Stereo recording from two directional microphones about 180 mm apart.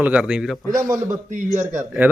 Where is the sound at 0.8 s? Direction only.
15° right (ahead or behind).